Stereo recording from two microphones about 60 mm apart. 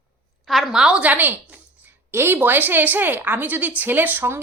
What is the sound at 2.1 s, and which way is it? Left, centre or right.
A woman's voice, right.